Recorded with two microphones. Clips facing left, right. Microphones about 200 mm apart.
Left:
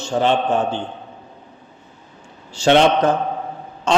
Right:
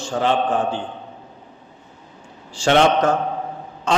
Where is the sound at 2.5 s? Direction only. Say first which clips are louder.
Left 2 dB; 25° left (ahead or behind).